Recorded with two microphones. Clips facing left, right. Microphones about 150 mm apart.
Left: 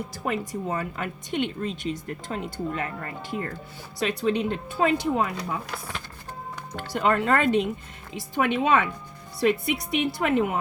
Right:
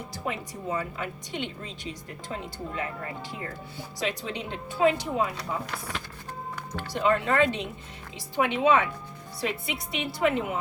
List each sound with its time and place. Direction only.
0.3 s speech: 55° left (ahead or behind)
6.9 s a woman's voice: 55° left (ahead or behind)